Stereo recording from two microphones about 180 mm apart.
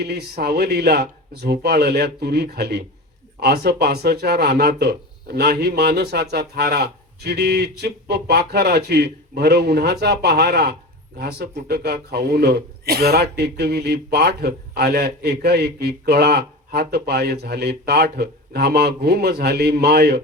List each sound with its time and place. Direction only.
0.0 s a man's voice: 65° right (ahead or behind)